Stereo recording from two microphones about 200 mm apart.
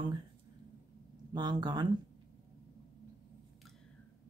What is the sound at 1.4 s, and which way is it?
Speech, 20° right (ahead or behind).